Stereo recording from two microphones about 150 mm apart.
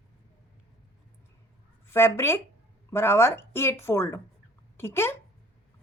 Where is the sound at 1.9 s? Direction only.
15° left (ahead or behind).